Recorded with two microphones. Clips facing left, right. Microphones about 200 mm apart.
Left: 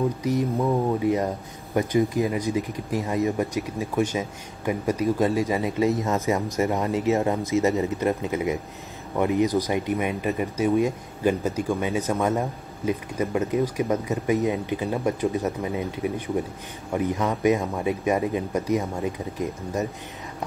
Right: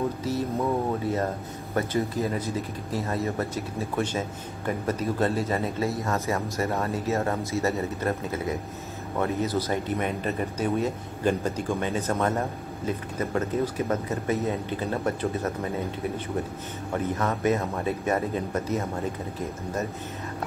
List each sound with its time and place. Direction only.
0.2 s speech: 15° left (ahead or behind)